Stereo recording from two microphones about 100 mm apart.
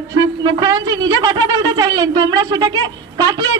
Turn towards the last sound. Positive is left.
turn(degrees=-40)  # may be behind; listen again after turning